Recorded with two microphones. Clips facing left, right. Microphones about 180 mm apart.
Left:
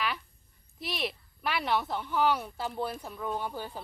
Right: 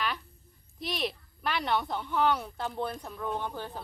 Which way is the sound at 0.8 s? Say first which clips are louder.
Right 2 dB; centre (ahead or behind).